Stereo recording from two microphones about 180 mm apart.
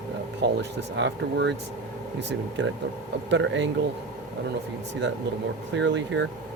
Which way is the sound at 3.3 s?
90° right.